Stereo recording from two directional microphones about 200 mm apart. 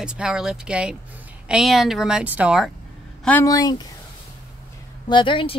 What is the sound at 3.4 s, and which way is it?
Speech, 20° left (ahead or behind).